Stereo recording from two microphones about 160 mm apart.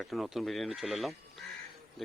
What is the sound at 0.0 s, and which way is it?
Speech, centre (ahead or behind).